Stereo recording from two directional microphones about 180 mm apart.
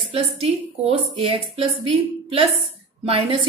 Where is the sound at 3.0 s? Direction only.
35° right (ahead or behind).